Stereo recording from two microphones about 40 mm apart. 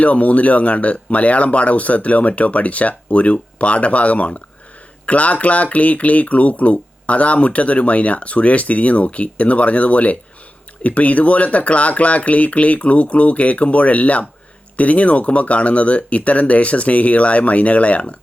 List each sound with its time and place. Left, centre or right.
0.0 s speech: left